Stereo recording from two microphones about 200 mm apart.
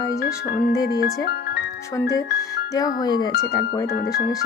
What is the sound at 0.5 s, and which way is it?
Speech, 55° left (ahead or behind).